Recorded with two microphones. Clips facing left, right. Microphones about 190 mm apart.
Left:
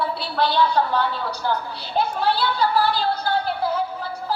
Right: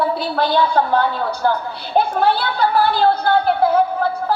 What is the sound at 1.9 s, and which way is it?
A woman's voice, 55° right (ahead or behind).